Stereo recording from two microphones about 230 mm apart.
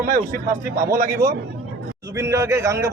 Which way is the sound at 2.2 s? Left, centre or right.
Centre.